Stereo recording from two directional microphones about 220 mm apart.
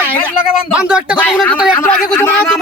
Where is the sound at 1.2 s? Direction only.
5° left (ahead or behind).